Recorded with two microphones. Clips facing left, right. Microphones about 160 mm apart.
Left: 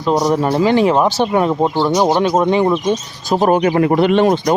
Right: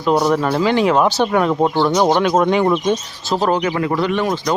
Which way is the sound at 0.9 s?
5° left (ahead or behind).